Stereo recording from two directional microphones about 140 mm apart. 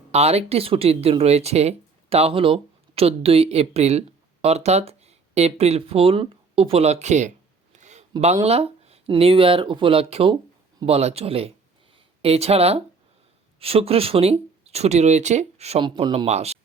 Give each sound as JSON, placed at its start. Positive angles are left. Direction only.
{"t": 0.1, "sound": "speech", "side_deg": -45}
{"t": 7.8, "sound": "a sound", "side_deg": -55}
{"t": 8.4, "sound": "speech", "side_deg": -45}
{"t": 15.8, "sound": "speech", "side_deg": -35}